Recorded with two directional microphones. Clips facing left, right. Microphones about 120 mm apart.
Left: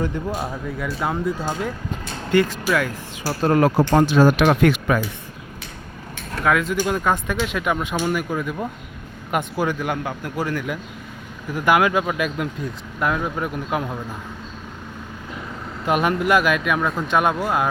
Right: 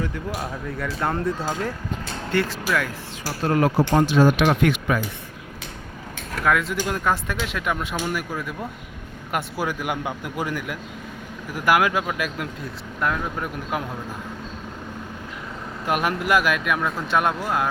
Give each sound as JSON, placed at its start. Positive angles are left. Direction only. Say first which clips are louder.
{"t": 0.7, "sound": "speech", "louder": "right 1 dB", "side_deg": 5}
{"t": 3.4, "sound": "speech", "louder": "left 3 dB", "side_deg": 45}
{"t": 6.3, "sound": "a man's voice", "louder": "left 2 dB", "side_deg": 0}
{"t": 15.9, "sound": "speech", "louder": "left 3 dB", "side_deg": 0}